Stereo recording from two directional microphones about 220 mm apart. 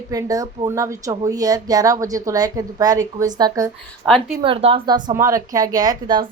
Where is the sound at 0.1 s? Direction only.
15° right (ahead or behind).